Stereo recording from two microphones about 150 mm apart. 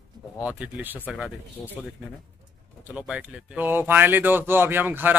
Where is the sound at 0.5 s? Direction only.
10° right (ahead or behind).